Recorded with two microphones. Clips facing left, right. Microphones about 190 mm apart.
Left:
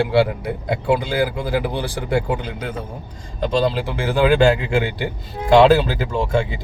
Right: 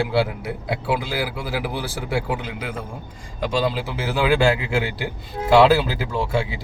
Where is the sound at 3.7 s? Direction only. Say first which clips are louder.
Left 4 dB; 5° right (ahead or behind).